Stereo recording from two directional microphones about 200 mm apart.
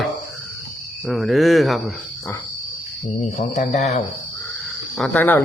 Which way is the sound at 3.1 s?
35° left (ahead or behind).